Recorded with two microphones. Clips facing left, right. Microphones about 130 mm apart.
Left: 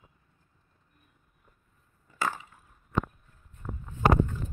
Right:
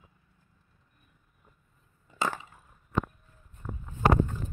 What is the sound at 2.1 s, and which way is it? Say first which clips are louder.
Wood: right 1 dB; 20° right (ahead or behind).